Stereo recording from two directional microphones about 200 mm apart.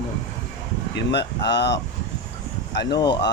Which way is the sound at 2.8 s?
25° left (ahead or behind).